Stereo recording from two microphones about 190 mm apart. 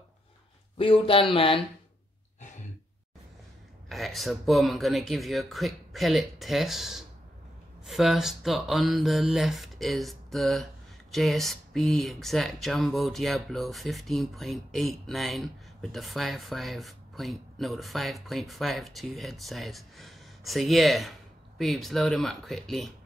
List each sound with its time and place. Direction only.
0.7 s speech: 30° left (ahead or behind)
3.9 s speech: centre (ahead or behind)